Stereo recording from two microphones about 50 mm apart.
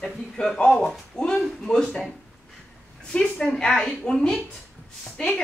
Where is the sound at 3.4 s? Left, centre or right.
Centre.